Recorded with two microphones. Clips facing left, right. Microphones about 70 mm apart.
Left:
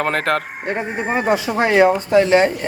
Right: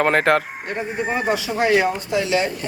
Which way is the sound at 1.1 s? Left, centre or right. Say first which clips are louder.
Left 5 dB; left.